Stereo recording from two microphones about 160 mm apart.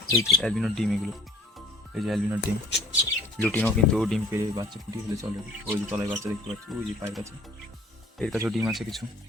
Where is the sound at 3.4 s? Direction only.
10° left (ahead or behind).